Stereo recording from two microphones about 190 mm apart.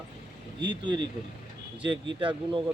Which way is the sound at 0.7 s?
25° right (ahead or behind).